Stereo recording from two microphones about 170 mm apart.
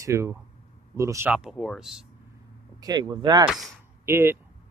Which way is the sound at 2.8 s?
25° right (ahead or behind).